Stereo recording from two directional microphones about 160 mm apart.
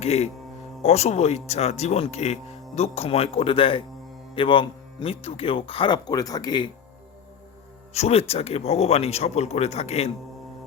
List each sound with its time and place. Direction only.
0.0 s speech: 40° left (ahead or behind)
7.9 s speech: 40° left (ahead or behind)